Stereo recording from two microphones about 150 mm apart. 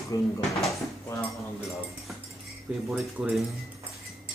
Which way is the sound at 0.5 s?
Centre (ahead or behind).